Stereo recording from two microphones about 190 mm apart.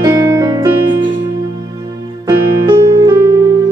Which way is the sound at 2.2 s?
25° right (ahead or behind).